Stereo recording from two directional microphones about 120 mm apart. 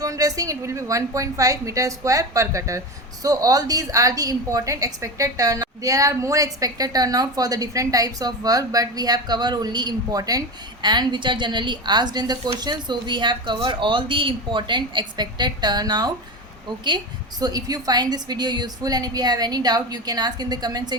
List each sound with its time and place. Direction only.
0.0 s a woman's voice: 30° right (ahead or behind)
17.4 s a woman's voice: 30° right (ahead or behind)